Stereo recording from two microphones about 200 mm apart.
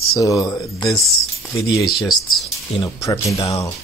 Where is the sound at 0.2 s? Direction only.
15° left (ahead or behind).